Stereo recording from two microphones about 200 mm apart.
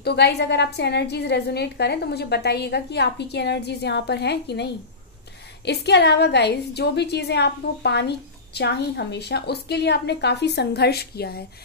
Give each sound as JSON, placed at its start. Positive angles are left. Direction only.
{"t": 0.0, "sound": "a woman's voice", "side_deg": 55}
{"t": 5.7, "sound": "a woman's voice", "side_deg": 55}